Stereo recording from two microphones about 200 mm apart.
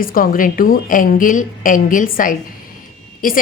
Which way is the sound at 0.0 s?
45° left (ahead or behind).